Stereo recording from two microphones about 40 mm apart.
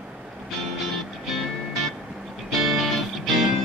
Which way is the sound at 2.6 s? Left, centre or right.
Centre.